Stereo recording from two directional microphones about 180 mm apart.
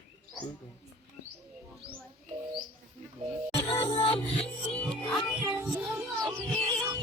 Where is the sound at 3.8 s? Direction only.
30° left (ahead or behind).